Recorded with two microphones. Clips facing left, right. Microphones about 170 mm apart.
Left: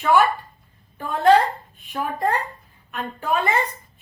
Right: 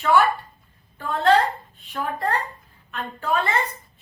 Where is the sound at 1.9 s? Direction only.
15° left (ahead or behind).